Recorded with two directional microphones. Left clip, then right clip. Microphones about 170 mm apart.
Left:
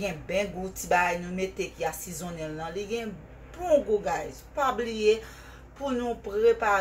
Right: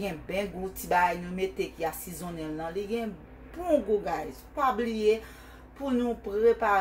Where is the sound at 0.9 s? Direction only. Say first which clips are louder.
Left 1 dB; 15° right (ahead or behind).